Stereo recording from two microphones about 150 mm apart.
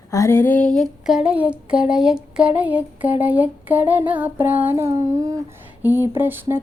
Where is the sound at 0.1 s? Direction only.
20° left (ahead or behind).